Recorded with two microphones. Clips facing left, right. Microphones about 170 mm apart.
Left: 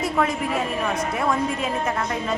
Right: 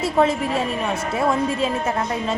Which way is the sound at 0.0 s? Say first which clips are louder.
Right 4 dB; 30° right (ahead or behind).